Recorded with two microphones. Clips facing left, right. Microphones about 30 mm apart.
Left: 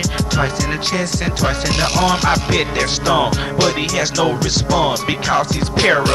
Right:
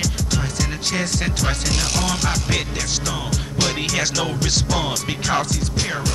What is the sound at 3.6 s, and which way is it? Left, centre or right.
Music, centre.